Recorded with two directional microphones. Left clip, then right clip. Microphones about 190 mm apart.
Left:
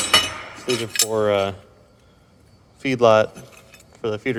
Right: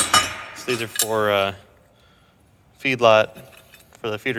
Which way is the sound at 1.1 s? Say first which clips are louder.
Right 1 dB; 15° left (ahead or behind).